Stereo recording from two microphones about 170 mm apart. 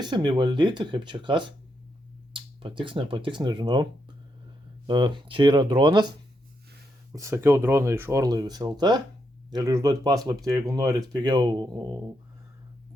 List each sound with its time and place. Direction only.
0.0 s speech: 25° right (ahead or behind)
4.9 s speech: 30° right (ahead or behind)
7.1 s speech: 15° right (ahead or behind)